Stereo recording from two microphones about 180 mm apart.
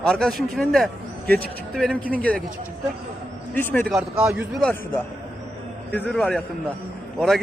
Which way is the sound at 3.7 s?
5° left (ahead or behind).